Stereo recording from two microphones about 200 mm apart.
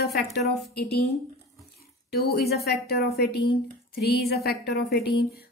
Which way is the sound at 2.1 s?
55° left (ahead or behind).